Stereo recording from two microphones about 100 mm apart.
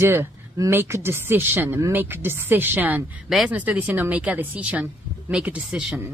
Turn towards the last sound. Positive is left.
turn(degrees=-10)  # may be behind; listen again after turning